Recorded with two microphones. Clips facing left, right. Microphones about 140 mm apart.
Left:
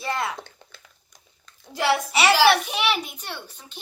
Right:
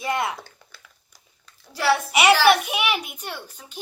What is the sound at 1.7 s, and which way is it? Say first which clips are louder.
Speech: right 1 dB; 15° left (ahead or behind).